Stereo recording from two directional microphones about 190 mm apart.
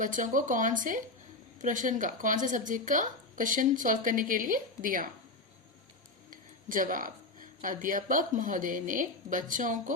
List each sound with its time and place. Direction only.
0.0 s speech: 45° right (ahead or behind)
6.3 s speech: 45° right (ahead or behind)